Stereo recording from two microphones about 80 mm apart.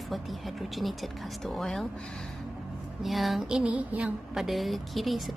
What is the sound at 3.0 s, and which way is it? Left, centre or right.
Speech, centre.